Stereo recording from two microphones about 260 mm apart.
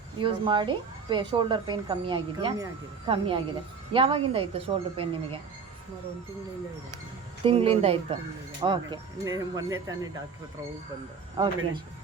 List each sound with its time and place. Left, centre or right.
0.2 s speech: centre
7.4 s speech: right
11.4 s speech: centre